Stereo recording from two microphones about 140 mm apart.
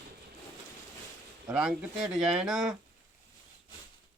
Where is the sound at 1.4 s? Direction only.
5° right (ahead or behind).